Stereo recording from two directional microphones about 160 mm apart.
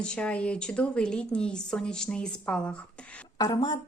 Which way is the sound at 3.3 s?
25° left (ahead or behind).